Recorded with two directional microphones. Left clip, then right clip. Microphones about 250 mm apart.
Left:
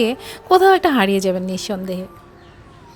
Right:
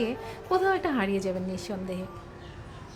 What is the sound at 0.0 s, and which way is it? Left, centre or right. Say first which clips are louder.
A woman's voice: left 11 dB; left.